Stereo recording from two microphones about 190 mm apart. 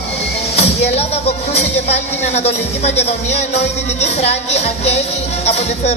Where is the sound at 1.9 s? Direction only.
35° left (ahead or behind).